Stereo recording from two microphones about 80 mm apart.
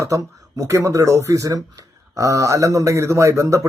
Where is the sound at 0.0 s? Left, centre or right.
Right.